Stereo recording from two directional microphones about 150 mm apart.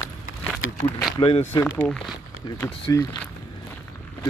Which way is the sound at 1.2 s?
40° left (ahead or behind).